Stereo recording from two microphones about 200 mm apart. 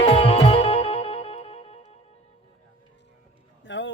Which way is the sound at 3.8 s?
65° left (ahead or behind).